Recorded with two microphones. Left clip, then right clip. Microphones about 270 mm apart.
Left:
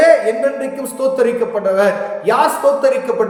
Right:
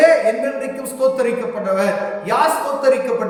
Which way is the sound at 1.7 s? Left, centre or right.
Centre.